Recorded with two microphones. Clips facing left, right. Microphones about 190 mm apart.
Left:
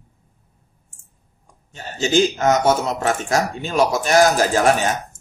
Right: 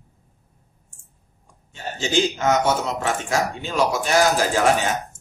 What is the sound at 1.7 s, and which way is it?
A man's voice, 40° left (ahead or behind).